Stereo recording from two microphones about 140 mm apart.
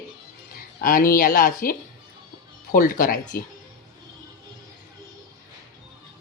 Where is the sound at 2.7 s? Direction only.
85° left.